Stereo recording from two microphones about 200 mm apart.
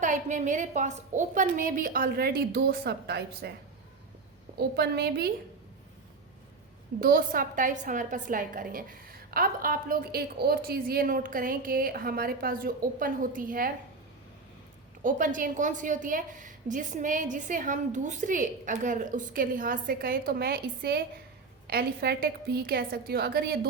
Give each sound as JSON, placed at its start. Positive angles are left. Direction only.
{"t": 0.0, "sound": "a woman's voice", "side_deg": -40}
{"t": 4.5, "sound": "a woman's voice", "side_deg": -55}
{"t": 7.0, "sound": "a woman's voice", "side_deg": -45}
{"t": 15.0, "sound": "a woman's voice", "side_deg": -40}